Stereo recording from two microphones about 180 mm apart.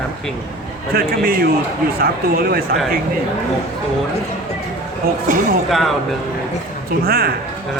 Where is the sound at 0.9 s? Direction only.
60° right (ahead or behind).